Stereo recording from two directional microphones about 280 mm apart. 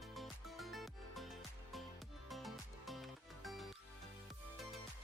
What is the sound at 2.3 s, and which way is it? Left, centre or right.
Music, centre.